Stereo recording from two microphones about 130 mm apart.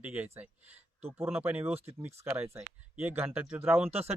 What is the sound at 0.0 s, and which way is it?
Speech, 15° right (ahead or behind).